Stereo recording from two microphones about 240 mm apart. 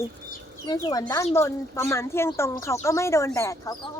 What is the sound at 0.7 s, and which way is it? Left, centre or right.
A woman's voice, centre.